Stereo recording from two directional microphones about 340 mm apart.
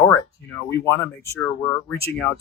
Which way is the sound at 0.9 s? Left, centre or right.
Centre.